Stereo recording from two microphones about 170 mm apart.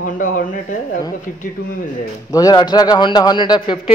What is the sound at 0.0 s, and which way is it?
Speech, 60° left (ahead or behind).